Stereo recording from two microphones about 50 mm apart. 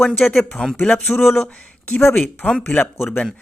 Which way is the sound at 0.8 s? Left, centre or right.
Left.